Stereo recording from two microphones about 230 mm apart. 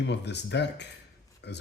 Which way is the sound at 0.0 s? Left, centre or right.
Left.